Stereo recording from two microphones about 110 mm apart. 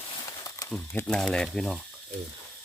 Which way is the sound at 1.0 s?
5° left (ahead or behind).